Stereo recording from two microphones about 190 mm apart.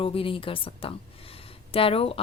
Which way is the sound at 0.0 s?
30° left (ahead or behind).